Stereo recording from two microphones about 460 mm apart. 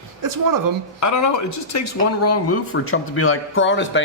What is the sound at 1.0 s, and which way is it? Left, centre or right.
Speech, left.